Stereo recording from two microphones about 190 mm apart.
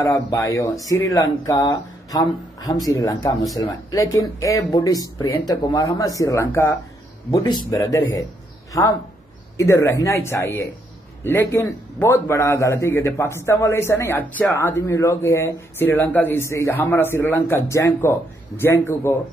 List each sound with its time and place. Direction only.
0.0 s a man's voice: 15° left (ahead or behind)